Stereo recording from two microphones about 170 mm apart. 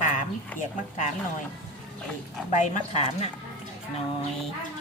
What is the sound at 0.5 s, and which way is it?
Speech, 50° left (ahead or behind).